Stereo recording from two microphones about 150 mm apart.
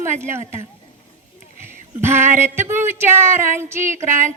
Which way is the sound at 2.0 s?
15° right (ahead or behind).